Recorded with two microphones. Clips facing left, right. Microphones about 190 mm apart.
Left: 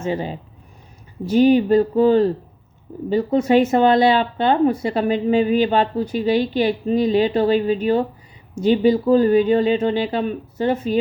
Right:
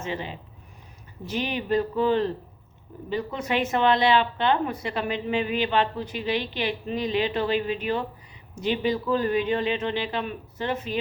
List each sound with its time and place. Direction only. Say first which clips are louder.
0.0 s speech: left 8 dB; 40° left (ahead or behind)
1.4 s speech: left 12 dB; 35° left (ahead or behind)